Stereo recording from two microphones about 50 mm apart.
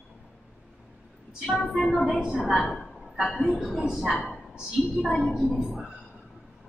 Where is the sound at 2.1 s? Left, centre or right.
Centre.